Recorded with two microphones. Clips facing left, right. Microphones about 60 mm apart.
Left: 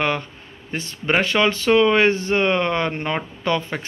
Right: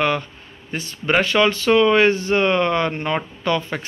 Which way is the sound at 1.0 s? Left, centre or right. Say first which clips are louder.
Right 2 dB; left.